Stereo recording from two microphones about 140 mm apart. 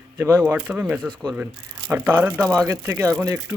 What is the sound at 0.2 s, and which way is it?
Speech, 10° right (ahead or behind).